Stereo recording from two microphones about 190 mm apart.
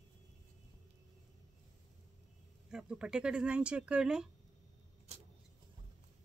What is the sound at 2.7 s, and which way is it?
A woman's voice, 5° right (ahead or behind).